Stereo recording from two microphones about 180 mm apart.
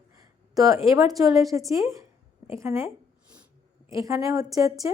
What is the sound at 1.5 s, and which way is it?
A woman's voice, 15° right (ahead or behind).